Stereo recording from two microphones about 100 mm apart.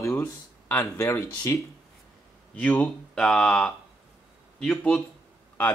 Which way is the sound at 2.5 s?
15° left (ahead or behind).